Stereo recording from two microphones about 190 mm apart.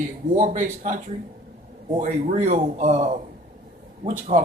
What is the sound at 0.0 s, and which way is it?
Speech, 40° right (ahead or behind).